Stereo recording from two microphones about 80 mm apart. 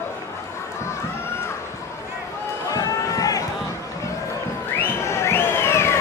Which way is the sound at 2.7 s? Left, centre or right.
Left.